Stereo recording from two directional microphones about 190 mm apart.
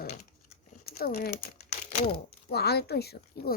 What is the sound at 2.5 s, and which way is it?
Speech, 55° left (ahead or behind).